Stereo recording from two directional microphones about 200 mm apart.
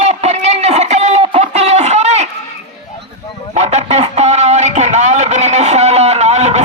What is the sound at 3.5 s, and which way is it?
Chicken, 35° right (ahead or behind).